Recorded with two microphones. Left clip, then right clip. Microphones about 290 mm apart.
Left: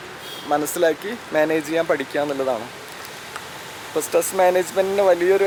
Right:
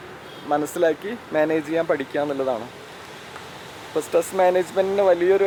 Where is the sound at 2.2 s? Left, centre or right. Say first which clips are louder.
Left 1 dB; right.